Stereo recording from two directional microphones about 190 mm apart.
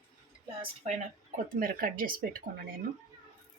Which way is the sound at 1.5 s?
50° right (ahead or behind).